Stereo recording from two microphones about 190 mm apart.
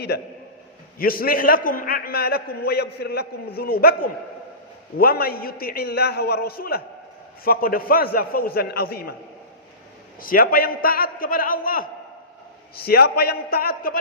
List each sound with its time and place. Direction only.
0.9 s a man's voice: 50° left (ahead or behind)
10.2 s a man's voice: 50° left (ahead or behind)